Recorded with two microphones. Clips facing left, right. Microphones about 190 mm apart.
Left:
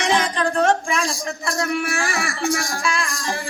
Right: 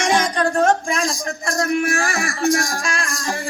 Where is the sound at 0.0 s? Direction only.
45° right (ahead or behind).